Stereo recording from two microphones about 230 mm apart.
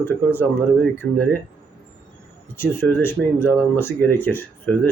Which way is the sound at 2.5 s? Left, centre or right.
Centre.